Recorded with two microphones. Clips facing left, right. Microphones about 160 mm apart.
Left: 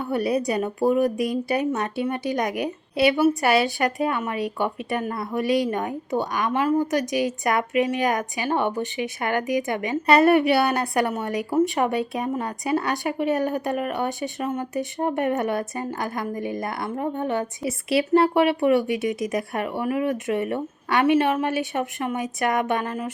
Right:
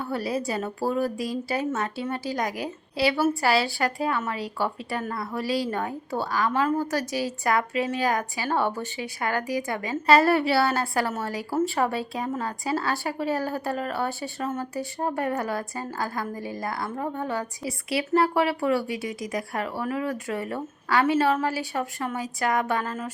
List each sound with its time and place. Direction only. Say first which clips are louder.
0.0 s speech: left 5 dB; 20° left (ahead or behind)